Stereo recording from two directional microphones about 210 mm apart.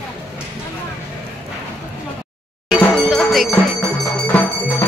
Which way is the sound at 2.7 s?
Centre (ahead or behind).